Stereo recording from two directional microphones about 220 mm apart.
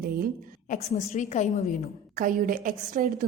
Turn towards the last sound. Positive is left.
turn(degrees=-35)  # may be behind; listen again after turning